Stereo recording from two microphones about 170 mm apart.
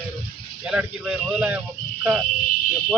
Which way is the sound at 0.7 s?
5° right (ahead or behind).